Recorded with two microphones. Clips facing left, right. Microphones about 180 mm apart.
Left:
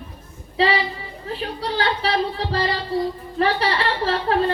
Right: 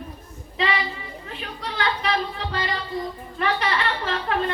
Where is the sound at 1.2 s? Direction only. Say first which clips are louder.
Left 9 dB; 35° left (ahead or behind).